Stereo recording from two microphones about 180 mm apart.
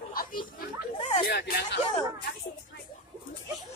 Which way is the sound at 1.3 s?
65° left (ahead or behind).